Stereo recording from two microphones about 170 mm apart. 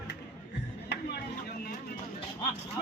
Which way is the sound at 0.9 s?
75° left (ahead or behind).